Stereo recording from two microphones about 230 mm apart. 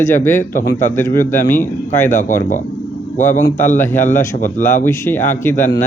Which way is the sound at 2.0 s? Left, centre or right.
Left.